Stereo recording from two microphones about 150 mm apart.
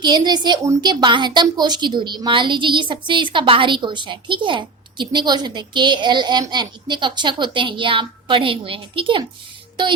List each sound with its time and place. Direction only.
0.0 s a woman's voice: 30° right (ahead or behind)